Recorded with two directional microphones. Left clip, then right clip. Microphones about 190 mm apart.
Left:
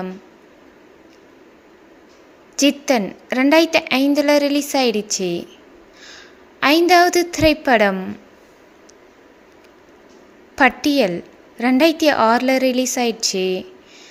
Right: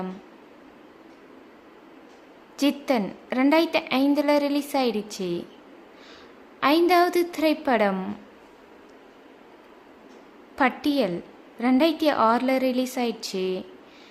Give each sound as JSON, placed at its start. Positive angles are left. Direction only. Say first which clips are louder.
{"t": 2.6, "sound": "a woman's voice", "louder": "left 7 dB", "side_deg": 15}
{"t": 10.5, "sound": "a woman's voice", "louder": "left 8 dB", "side_deg": 15}